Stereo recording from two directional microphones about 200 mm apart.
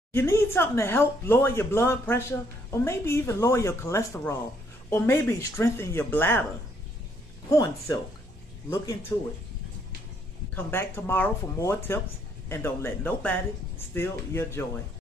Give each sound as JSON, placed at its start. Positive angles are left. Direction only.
{"t": 0.1, "sound": "speech", "side_deg": 15}
{"t": 7.4, "sound": "speech", "side_deg": 15}
{"t": 10.5, "sound": "speech", "side_deg": 10}